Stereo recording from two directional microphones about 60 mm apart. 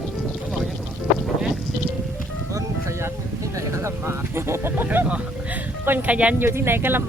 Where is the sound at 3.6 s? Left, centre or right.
Right.